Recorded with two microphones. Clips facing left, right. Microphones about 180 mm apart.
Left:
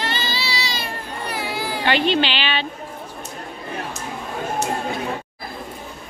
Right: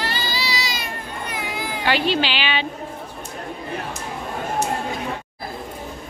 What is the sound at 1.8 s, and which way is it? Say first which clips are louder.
Speech: left 1 dB; 5° right (ahead or behind).